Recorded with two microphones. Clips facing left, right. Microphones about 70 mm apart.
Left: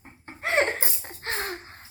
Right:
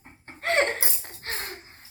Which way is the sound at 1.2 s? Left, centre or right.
Left.